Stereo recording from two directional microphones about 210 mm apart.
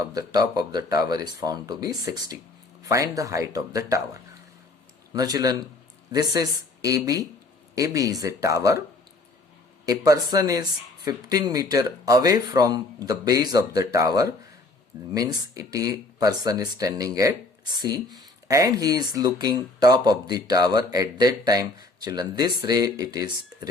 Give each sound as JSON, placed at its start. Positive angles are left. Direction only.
{"t": 0.0, "sound": "speech", "side_deg": -15}
{"t": 9.8, "sound": "speech", "side_deg": -15}